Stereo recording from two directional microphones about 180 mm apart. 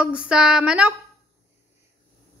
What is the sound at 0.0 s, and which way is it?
Speech, 5° right (ahead or behind).